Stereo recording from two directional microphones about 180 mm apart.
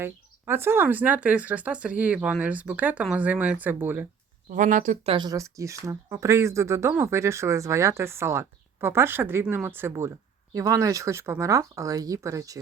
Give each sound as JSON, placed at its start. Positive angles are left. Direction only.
{"t": 0.0, "sound": "speech", "side_deg": -15}
{"t": 4.4, "sound": "speech", "side_deg": -45}
{"t": 5.1, "sound": "speech", "side_deg": -20}